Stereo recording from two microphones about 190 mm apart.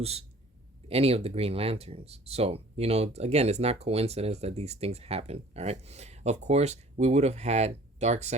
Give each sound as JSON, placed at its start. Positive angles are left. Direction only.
{"t": 0.0, "sound": "speech", "side_deg": -30}